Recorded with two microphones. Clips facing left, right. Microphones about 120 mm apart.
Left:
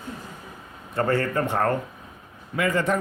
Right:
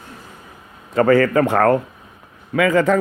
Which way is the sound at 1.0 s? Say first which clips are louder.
Right 9 dB; 90° right.